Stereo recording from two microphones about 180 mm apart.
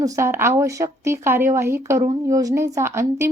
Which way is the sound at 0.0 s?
15° right (ahead or behind).